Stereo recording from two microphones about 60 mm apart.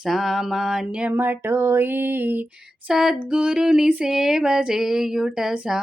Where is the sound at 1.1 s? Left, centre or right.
Right.